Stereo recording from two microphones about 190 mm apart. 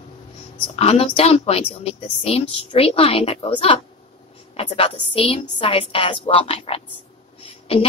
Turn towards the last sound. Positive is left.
turn(degrees=30)  # may be behind; listen again after turning